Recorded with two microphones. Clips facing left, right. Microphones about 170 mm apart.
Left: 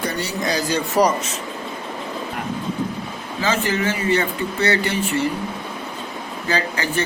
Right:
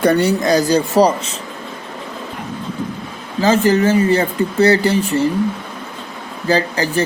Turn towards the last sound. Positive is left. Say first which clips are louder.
# right 6 dB
turn(degrees=-35)  # may be behind; listen again after turning